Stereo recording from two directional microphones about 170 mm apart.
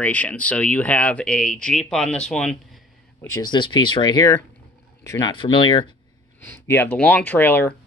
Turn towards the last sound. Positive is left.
turn(degrees=10)  # may be behind; listen again after turning